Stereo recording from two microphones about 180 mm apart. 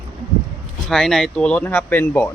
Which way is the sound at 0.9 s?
Centre (ahead or behind).